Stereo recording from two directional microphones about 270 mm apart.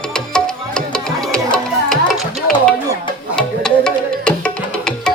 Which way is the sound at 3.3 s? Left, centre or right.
Centre.